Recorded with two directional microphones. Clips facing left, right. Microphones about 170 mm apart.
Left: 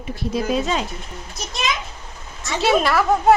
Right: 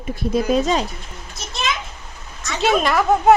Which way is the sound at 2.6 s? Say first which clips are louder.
Even; centre (ahead or behind).